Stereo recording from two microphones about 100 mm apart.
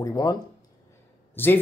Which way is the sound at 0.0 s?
40° left (ahead or behind).